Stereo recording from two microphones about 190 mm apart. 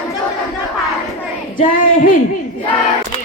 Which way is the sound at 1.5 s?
45° left (ahead or behind).